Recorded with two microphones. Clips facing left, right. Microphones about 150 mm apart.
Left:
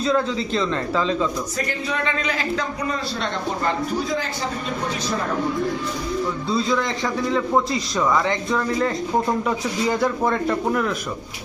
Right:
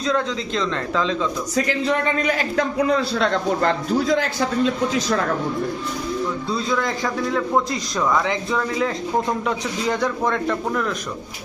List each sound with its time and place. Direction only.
0.0 s a man's voice: 5° left (ahead or behind)
2.2 s speech: 55° right (ahead or behind)
2.8 s a man's voice: 80° right
6.5 s a man's voice: centre (ahead or behind)